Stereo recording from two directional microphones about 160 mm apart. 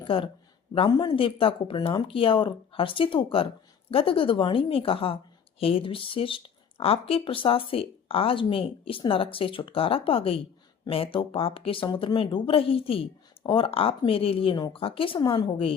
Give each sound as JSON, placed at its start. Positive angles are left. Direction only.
{"t": 0.0, "sound": "a woman's voice", "side_deg": 30}